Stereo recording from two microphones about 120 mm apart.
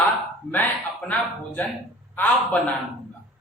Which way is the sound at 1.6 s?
10° left (ahead or behind).